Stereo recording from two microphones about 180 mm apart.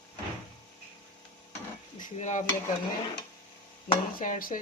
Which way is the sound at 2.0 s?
45° left (ahead or behind).